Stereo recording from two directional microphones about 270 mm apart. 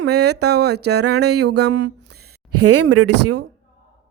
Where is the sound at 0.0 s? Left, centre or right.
Right.